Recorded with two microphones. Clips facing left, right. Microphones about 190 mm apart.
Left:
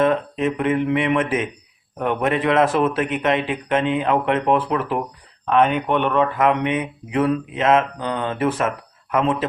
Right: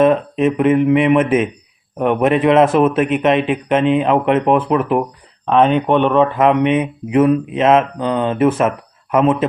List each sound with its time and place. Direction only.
0.0 s a man's voice: 20° right (ahead or behind)